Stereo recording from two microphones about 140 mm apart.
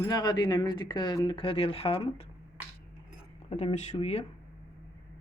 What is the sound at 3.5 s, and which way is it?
Speech, 45° left (ahead or behind).